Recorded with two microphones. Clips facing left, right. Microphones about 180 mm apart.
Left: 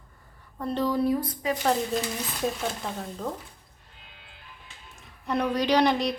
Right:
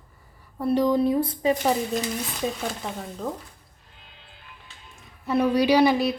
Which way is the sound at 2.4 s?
Centre (ahead or behind).